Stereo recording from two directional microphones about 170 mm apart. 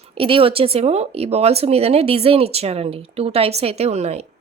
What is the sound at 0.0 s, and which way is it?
Speech, 35° right (ahead or behind).